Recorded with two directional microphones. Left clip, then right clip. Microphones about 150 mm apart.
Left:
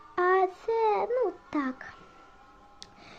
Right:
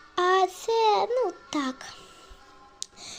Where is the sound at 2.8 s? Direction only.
5° left (ahead or behind).